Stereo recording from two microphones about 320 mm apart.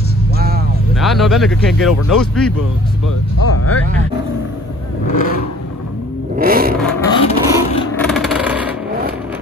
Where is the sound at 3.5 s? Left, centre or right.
Left.